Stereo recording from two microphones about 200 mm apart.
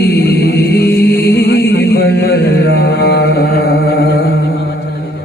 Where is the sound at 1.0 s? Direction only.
55° left (ahead or behind).